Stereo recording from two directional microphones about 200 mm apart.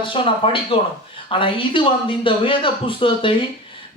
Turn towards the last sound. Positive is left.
turn(degrees=25)  # may be behind; listen again after turning